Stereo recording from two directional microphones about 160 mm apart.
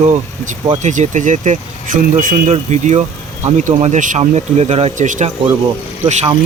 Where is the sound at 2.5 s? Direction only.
45° right (ahead or behind).